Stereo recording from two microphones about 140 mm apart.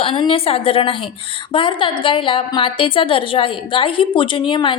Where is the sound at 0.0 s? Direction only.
40° left (ahead or behind).